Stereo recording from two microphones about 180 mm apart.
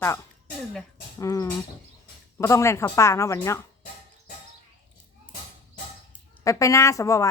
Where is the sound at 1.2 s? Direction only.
15° left (ahead or behind).